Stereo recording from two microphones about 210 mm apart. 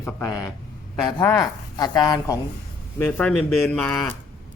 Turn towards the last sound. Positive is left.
turn(degrees=5)  # may be behind; listen again after turning